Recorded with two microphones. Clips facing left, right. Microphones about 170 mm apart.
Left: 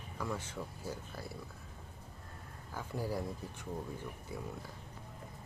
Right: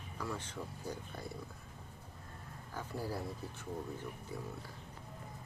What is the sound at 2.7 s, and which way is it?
Speech, 15° left (ahead or behind).